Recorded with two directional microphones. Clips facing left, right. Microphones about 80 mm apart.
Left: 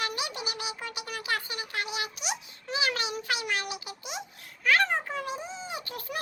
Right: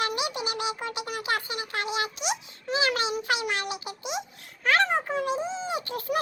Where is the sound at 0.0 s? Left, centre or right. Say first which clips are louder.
Right 5 dB; right.